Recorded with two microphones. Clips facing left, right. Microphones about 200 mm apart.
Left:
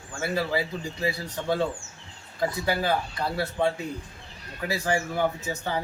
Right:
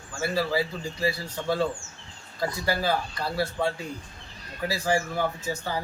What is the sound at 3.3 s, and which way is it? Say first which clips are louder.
Speech: left 1 dB; 20° left (ahead or behind).